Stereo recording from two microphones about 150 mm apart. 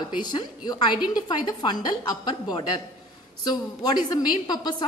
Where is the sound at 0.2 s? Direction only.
30° left (ahead or behind).